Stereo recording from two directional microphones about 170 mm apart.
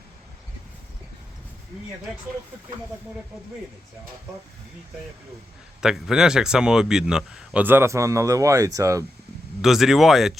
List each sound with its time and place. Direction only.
5.8 s a man's voice: 5° right (ahead or behind); by 9.0 s 20° right (ahead or behind)
9.6 s a man's voice: centre (ahead or behind)